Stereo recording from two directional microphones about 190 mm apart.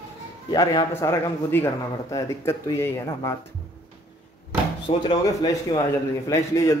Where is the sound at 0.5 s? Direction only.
20° left (ahead or behind).